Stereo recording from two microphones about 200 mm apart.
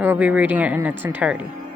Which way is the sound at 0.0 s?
10° right (ahead or behind).